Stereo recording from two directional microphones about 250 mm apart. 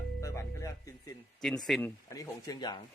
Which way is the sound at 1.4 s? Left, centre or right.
Centre.